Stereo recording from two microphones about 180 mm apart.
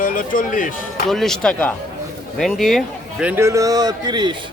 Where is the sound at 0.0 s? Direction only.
50° left (ahead or behind).